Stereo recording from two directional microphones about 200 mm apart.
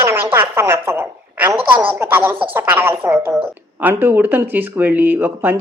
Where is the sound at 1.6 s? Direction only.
25° right (ahead or behind).